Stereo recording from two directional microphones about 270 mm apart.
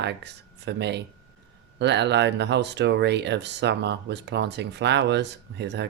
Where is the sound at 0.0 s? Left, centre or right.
Right.